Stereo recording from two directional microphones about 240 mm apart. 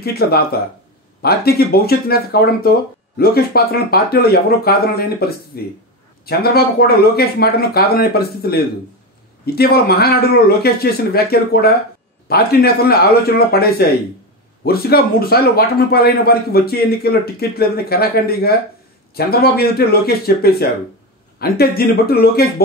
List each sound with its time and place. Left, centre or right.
0.0 s speech: left